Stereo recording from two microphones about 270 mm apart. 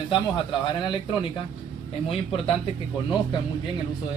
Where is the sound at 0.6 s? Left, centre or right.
Centre.